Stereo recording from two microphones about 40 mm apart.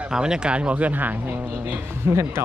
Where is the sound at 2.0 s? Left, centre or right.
Right.